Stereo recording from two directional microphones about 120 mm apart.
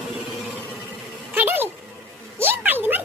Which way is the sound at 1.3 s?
15° right (ahead or behind).